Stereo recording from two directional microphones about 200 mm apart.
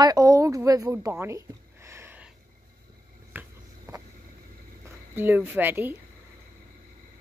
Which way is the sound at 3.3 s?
10° right (ahead or behind).